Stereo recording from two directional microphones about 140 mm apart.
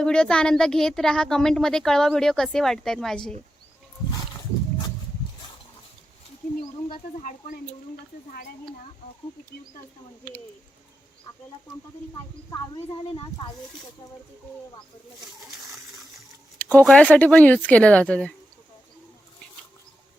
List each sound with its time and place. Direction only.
0.0 s speech: 5° left (ahead or behind)
6.9 s speech: 70° left (ahead or behind)
12.1 s speech: 25° left (ahead or behind)
16.6 s a sound: 10° left (ahead or behind)
16.8 s speech: 10° left (ahead or behind)